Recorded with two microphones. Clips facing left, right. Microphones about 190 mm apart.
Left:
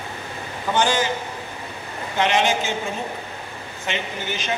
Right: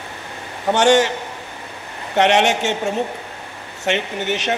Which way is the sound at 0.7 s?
75° right (ahead or behind).